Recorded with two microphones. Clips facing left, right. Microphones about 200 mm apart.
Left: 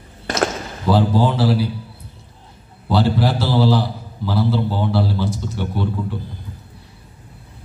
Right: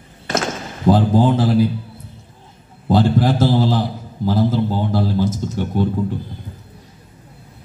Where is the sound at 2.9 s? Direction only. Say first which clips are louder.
Right 3 dB; 45° right (ahead or behind).